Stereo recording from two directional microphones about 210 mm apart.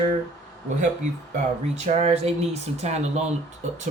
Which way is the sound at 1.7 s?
30° right (ahead or behind).